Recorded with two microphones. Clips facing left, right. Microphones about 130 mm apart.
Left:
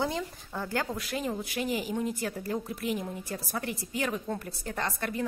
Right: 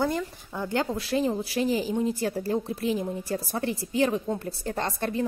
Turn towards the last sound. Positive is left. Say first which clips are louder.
# right 4 dB
turn(degrees=-30)  # may be behind; listen again after turning